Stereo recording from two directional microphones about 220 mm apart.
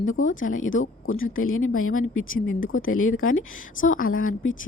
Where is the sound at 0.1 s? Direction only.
65° left (ahead or behind).